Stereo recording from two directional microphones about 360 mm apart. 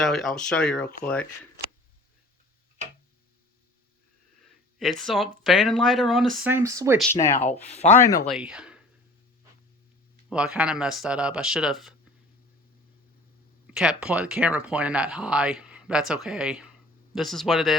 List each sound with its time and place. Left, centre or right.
0.0 s speech: centre
4.8 s speech: centre
7.1 s speech: centre
8.3 s speech: centre
10.2 s speech: centre
13.7 s speech: centre